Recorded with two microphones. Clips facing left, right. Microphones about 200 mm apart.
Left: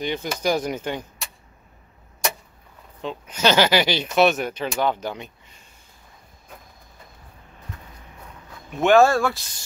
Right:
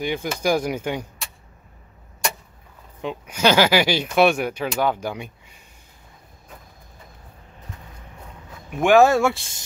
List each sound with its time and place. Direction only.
0.0 s speech: 10° right (ahead or behind)
3.0 s speech: 10° right (ahead or behind)
8.6 s speech: 10° right (ahead or behind)